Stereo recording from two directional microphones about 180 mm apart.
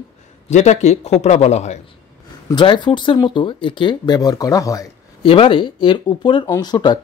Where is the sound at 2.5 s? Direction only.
25° left (ahead or behind).